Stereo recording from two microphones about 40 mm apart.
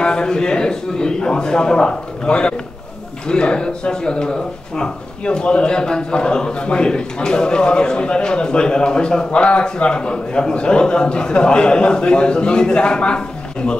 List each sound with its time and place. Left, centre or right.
0.0 s speech: centre